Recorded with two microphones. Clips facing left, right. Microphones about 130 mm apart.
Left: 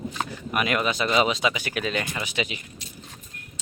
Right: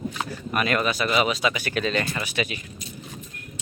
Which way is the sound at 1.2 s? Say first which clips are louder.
Even; 20° left (ahead or behind).